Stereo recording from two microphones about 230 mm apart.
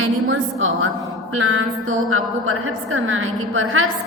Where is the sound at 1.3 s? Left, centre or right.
Right.